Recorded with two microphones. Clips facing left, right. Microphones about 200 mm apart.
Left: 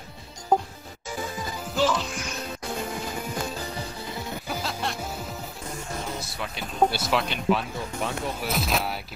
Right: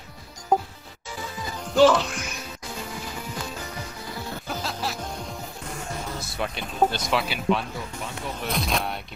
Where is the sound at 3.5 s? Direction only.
30° left (ahead or behind).